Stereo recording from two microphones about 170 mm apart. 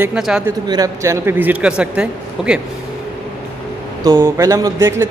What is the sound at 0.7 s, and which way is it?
Speech, 20° right (ahead or behind).